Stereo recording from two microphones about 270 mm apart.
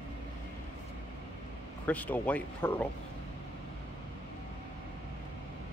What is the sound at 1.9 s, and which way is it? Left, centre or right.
Speech, centre.